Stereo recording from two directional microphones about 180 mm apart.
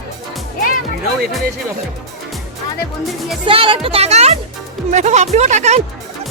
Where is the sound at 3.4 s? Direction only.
30° right (ahead or behind).